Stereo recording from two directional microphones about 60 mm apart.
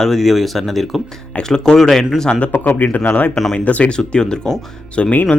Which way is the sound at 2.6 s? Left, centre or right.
Left.